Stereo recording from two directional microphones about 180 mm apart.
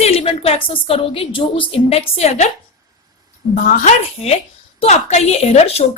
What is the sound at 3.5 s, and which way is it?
A woman's voice, 45° left (ahead or behind).